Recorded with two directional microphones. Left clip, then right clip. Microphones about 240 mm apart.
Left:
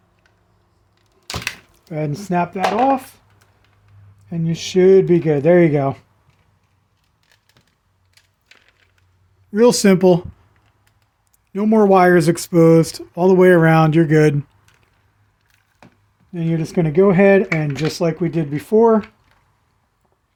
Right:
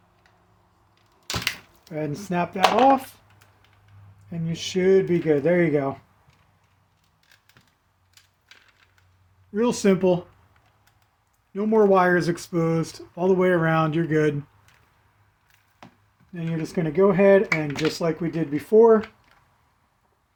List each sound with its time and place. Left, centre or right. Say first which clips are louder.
1.3 s a sound: left 1 dB; centre
1.9 s speech: left 6 dB; left
4.3 s speech: left 6 dB; left
9.5 s speech: left 9 dB; left
11.5 s speech: left 5 dB; left
16.3 s speech: left 7 dB; left